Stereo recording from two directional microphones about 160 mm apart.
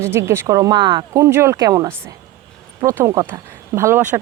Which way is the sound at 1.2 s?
15° right (ahead or behind).